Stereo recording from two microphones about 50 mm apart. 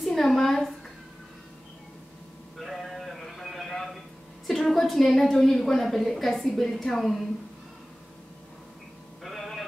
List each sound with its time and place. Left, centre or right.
0.0 s a woman's voice: centre
2.6 s sheep: centre
4.5 s a woman's voice: centre
9.2 s a sound: centre